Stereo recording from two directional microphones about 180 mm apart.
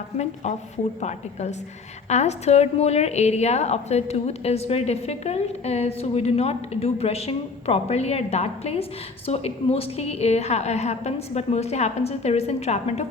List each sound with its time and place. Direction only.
1.0 s a woman's voice: 40° left (ahead or behind)